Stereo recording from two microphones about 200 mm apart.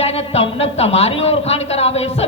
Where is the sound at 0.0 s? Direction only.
30° left (ahead or behind).